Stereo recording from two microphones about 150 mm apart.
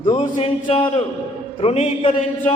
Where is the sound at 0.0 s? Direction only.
35° left (ahead or behind).